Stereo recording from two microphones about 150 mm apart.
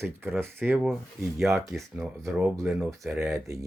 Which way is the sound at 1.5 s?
20° right (ahead or behind).